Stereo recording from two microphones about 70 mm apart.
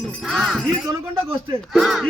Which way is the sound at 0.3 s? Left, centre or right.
Centre.